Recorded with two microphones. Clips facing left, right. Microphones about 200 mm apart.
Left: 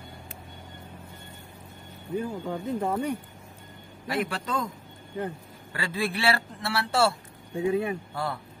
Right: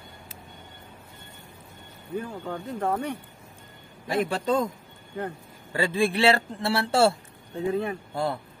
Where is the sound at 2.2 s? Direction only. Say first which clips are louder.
Left 3 dB; 10° left (ahead or behind).